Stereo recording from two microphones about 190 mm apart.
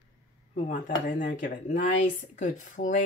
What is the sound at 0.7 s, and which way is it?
Speech, 40° left (ahead or behind).